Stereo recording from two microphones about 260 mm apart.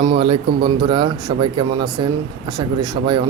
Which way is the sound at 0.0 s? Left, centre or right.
Right.